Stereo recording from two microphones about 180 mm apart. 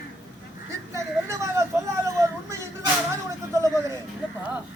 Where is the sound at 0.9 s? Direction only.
15° right (ahead or behind).